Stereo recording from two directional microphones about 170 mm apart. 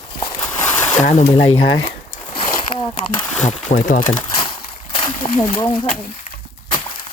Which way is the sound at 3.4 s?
45° left (ahead or behind).